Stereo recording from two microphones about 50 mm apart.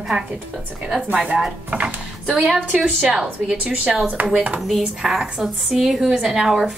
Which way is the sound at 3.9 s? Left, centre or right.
Centre.